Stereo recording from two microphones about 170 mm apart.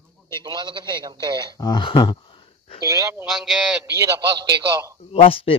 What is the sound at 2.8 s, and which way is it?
Speech, 20° right (ahead or behind).